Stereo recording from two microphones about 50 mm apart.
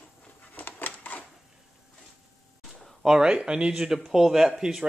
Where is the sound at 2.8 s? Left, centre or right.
Centre.